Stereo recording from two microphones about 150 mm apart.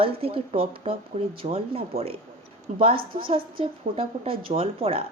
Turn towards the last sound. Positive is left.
turn(degrees=-40)  # may be behind; listen again after turning